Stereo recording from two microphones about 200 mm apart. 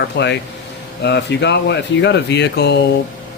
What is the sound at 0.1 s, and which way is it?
Speech, 55° left (ahead or behind).